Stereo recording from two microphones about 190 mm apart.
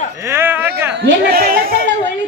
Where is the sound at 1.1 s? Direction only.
50° right (ahead or behind).